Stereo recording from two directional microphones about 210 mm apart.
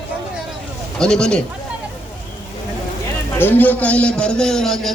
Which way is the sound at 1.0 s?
5° left (ahead or behind).